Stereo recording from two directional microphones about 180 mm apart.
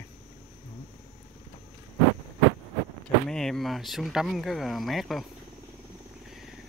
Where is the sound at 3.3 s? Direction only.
5° left (ahead or behind).